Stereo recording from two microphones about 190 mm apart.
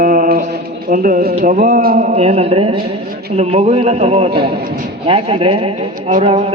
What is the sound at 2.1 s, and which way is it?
Speech, 35° right (ahead or behind).